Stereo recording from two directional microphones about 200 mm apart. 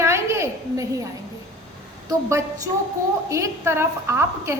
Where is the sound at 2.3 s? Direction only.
15° right (ahead or behind).